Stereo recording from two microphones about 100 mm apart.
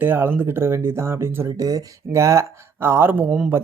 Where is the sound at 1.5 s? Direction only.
35° right (ahead or behind).